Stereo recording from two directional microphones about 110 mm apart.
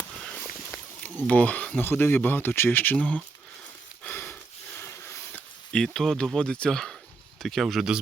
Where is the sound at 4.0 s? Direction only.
10° left (ahead or behind).